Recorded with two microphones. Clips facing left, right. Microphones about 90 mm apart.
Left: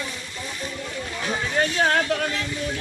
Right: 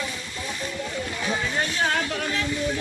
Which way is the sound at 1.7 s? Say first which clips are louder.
Left 5 dB; 45° left (ahead or behind).